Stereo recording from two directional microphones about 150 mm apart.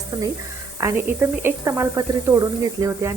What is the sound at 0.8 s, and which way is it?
Speech, 15° right (ahead or behind).